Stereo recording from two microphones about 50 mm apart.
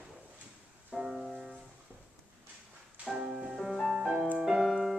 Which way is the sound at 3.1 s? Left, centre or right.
Centre.